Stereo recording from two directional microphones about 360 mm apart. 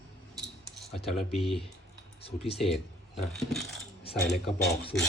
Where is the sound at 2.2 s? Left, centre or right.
Centre.